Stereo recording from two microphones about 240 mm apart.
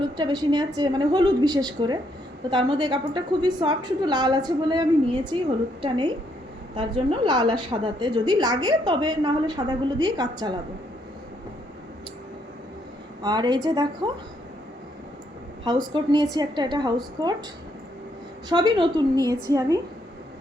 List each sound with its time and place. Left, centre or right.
0.2 s a woman's voice: centre
6.7 s a woman's voice: centre
13.2 s a woman's voice: centre
15.6 s a woman's voice: centre
18.4 s a woman's voice: centre